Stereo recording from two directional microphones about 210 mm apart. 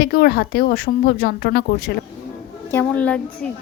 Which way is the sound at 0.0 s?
50° left (ahead or behind).